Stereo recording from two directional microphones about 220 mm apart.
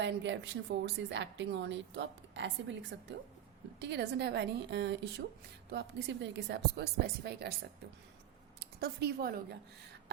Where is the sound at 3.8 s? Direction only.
50° right (ahead or behind).